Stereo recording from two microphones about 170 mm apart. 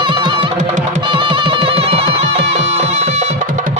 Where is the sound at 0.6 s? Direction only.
45° right (ahead or behind).